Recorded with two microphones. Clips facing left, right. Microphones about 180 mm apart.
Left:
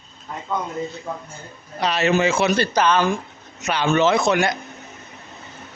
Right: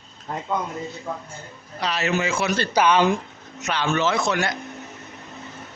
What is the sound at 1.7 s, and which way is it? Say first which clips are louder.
Speech: left 5 dB; 20° left (ahead or behind).